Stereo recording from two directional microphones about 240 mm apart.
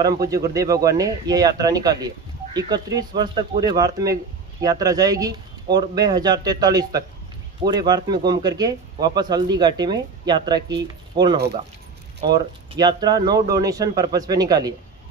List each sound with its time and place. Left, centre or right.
0.0 s a man's voice: centre
12.7 s a man's voice: centre